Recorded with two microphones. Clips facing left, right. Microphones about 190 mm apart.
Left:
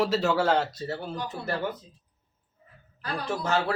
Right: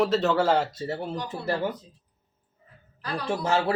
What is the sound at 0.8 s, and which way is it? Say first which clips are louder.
Speech: right 2 dB; 25° right (ahead or behind).